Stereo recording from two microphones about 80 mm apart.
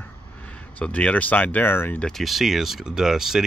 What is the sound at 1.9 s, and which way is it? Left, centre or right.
Speech, centre.